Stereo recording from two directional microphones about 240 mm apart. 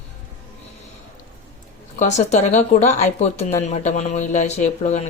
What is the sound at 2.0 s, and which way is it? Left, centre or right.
Speech, left.